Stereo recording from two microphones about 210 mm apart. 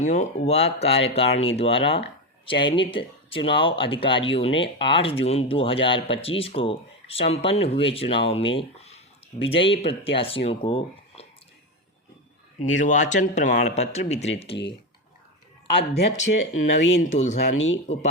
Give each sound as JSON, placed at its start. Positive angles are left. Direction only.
{"t": 0.0, "sound": "speech", "side_deg": 35}
{"t": 12.8, "sound": "speech", "side_deg": 35}
{"t": 15.8, "sound": "speech", "side_deg": 35}
{"t": 16.7, "sound": "speech", "side_deg": 60}
{"t": 17.1, "sound": "speech", "side_deg": 35}
{"t": 17.4, "sound": "speech", "side_deg": 70}